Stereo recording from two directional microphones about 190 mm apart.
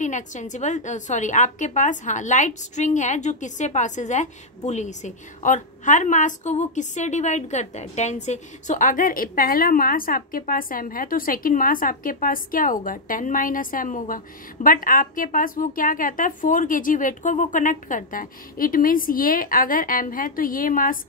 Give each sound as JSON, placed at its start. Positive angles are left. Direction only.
{"t": 0.0, "sound": "a woman's voice", "side_deg": 40}